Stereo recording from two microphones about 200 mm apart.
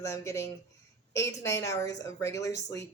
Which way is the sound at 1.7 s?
15° left (ahead or behind).